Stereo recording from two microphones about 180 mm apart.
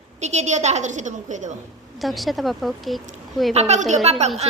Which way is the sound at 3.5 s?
35° right (ahead or behind).